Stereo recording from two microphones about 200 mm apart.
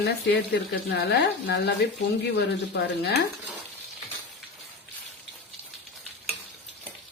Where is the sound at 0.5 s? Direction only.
55° left (ahead or behind).